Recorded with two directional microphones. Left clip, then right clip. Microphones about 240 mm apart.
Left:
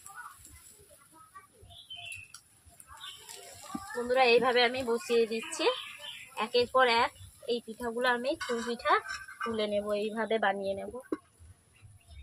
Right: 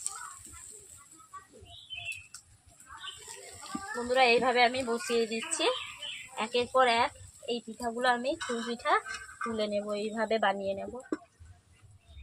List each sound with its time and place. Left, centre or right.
3.9 s speech: centre
8.4 s speech: left
8.7 s speech: centre